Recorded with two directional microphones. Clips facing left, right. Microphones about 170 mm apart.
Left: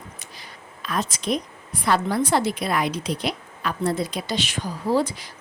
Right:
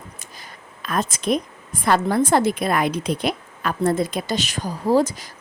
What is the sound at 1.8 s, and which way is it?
A woman's voice, 50° right (ahead or behind).